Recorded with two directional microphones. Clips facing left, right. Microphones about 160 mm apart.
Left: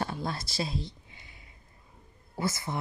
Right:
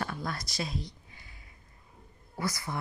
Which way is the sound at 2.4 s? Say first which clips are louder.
Left 2 dB; 25° left (ahead or behind).